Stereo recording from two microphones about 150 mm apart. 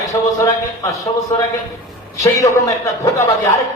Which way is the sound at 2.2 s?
20° left (ahead or behind).